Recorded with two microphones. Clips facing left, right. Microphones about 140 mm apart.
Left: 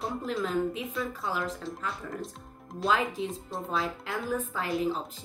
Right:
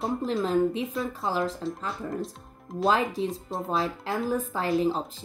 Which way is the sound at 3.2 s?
35° right (ahead or behind).